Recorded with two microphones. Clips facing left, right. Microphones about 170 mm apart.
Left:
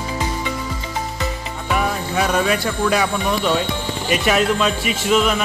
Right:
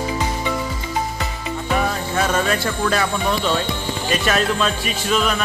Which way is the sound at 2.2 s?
10° left (ahead or behind).